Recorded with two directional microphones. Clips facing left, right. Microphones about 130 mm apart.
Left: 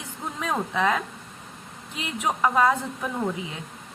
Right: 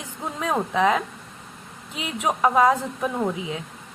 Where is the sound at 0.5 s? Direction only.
20° right (ahead or behind).